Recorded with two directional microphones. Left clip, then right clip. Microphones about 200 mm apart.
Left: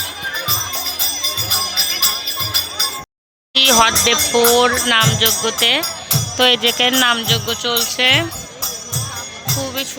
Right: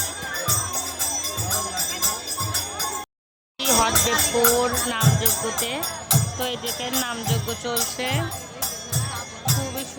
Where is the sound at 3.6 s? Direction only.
10° left (ahead or behind).